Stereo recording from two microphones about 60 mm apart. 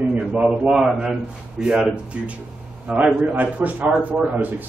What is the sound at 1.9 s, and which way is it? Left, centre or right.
A man's voice, centre.